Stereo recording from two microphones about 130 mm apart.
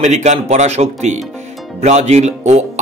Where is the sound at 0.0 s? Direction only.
65° right (ahead or behind).